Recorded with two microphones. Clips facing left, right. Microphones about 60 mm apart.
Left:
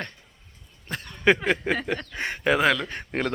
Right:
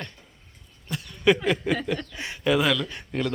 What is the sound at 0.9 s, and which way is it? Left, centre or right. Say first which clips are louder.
Speech: even; left.